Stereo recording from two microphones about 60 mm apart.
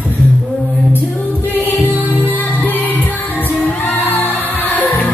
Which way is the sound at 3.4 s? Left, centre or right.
Left.